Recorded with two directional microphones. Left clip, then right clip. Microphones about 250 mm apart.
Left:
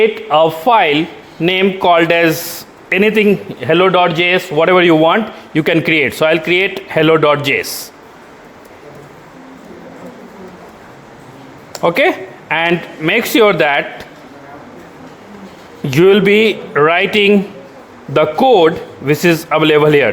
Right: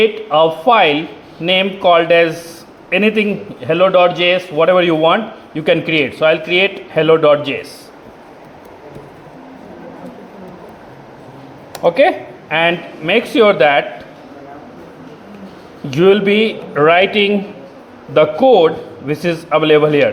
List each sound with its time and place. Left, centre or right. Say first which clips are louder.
0.0 s a man's voice: left 1 dB; left
11.8 s a man's voice: right 1 dB; left
15.9 s a man's voice: left 2 dB; left